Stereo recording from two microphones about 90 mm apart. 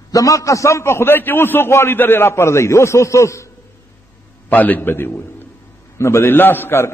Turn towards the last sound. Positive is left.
turn(degrees=25)  # may be behind; listen again after turning